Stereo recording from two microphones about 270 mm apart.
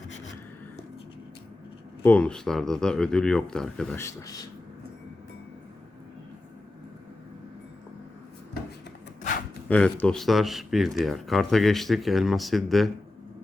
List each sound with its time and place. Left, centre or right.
2.0 s speech: centre
9.6 s speech: centre